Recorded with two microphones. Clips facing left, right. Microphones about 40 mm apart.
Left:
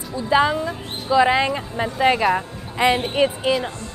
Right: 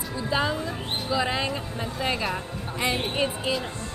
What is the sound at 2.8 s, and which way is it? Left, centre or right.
Speech, left.